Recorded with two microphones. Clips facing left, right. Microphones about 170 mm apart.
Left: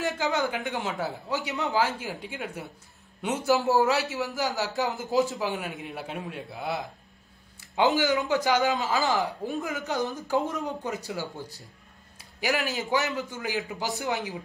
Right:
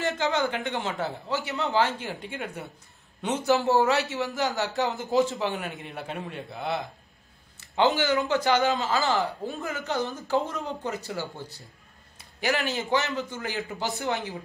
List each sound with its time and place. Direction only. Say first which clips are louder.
0.0 s speech: right 1 dB; centre (ahead or behind)
7.9 s a man's voice: even; centre (ahead or behind)
12.4 s a man's voice: right 1 dB; 5° left (ahead or behind)
14.0 s a man's voice: right 1 dB; 15° left (ahead or behind)